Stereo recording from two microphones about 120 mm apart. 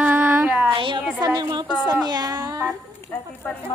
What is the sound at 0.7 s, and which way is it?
A woman's voice, 45° right (ahead or behind).